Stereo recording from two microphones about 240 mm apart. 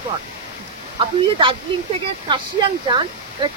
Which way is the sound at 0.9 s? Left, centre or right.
Right.